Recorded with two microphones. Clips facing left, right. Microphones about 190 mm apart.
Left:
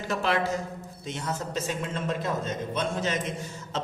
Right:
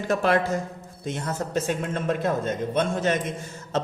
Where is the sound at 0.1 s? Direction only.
50° right (ahead or behind).